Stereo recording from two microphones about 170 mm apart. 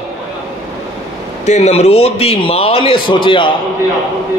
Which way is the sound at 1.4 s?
40° left (ahead or behind).